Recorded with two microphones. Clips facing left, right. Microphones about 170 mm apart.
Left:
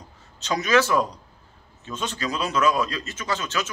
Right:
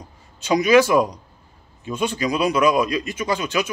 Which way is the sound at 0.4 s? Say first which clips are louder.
Right 6 dB; 10° right (ahead or behind).